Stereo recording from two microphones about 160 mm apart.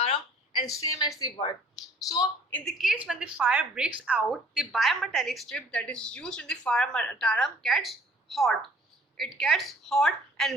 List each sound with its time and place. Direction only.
0.0 s a sound: 35° left (ahead or behind)
0.6 s a woman's voice: 20° left (ahead or behind)
2.5 s a woman's voice: centre (ahead or behind)